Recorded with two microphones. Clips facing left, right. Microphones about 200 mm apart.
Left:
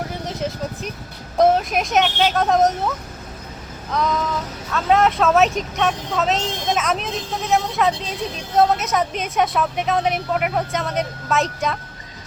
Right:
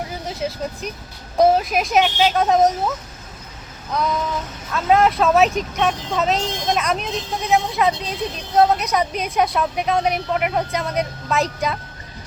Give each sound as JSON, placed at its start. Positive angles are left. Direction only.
{"t": 0.3, "sound": "vehicle", "side_deg": 0}
{"t": 1.4, "sound": "speech", "side_deg": 0}
{"t": 4.7, "sound": "speech", "side_deg": 0}